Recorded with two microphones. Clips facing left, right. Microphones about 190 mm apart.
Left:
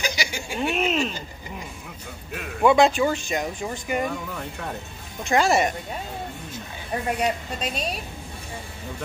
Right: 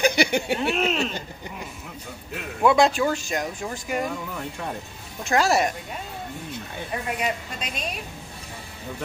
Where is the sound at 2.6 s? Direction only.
Centre (ahead or behind).